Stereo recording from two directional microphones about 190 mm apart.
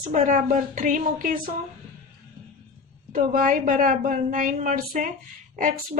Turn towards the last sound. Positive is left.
turn(degrees=-45)  # may be behind; listen again after turning